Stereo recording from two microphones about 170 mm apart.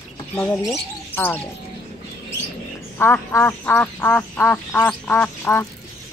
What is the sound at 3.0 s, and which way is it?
Speech, 15° left (ahead or behind).